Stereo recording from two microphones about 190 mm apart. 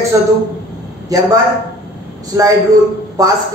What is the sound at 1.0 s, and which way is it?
A man's voice, 20° right (ahead or behind).